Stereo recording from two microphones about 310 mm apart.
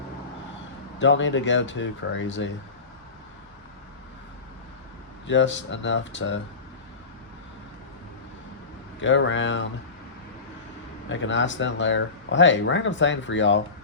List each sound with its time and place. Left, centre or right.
0.9 s speech: left
5.2 s speech: left
9.0 s speech: left
11.1 s speech: left